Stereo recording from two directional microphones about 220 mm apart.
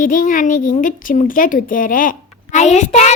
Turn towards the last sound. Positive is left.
turn(degrees=30)  # may be behind; listen again after turning